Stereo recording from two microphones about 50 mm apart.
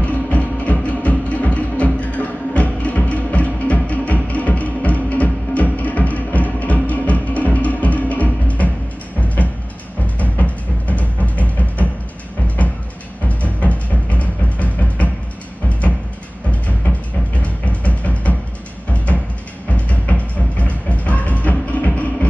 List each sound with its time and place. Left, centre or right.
0.0 s music: left
13.3 s music: left
17.4 s music: left
19.7 s music: left